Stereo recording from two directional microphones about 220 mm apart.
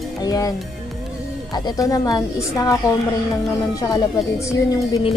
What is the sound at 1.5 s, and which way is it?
Speech, 15° left (ahead or behind).